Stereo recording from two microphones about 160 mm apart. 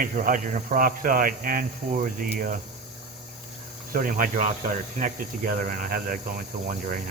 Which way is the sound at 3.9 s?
60° right (ahead or behind).